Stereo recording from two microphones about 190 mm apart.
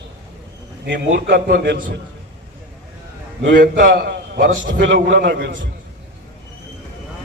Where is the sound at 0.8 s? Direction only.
70° right (ahead or behind).